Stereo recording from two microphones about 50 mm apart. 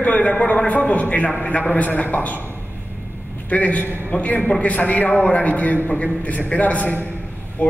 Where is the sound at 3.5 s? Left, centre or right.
Left.